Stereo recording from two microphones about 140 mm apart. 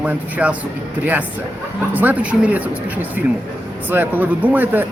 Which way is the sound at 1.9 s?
10° right (ahead or behind).